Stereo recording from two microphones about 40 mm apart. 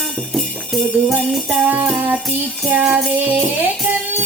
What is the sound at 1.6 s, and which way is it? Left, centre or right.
Music, right.